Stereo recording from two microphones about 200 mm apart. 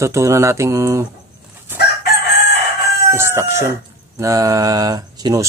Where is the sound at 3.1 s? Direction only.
10° right (ahead or behind).